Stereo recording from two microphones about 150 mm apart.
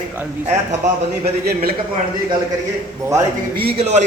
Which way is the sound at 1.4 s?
85° right.